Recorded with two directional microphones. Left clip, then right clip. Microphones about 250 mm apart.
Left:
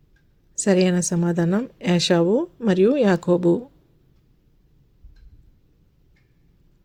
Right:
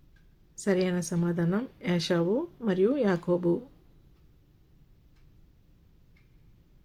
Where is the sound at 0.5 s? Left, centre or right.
Left.